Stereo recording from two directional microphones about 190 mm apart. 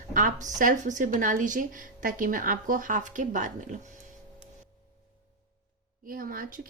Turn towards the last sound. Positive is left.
turn(degrees=-45)  # may be behind; listen again after turning